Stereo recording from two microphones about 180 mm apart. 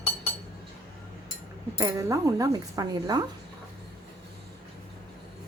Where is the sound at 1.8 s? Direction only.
15° right (ahead or behind).